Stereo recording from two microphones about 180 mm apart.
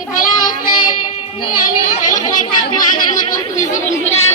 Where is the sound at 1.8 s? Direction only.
50° left (ahead or behind).